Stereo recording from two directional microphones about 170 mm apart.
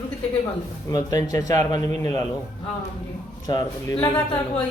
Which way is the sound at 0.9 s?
20° left (ahead or behind).